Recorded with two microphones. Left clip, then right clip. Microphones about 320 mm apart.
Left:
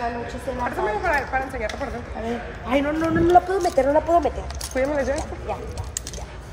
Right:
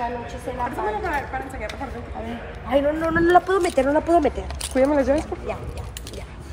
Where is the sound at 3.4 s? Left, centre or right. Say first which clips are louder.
Even; right.